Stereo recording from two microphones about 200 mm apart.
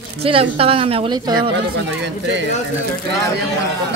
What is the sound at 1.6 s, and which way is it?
Speech, 60° right (ahead or behind).